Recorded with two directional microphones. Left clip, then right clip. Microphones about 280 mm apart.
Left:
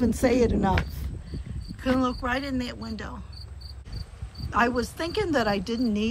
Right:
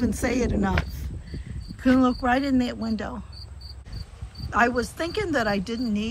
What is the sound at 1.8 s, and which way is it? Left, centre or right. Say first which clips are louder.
Speech: right 4 dB; centre.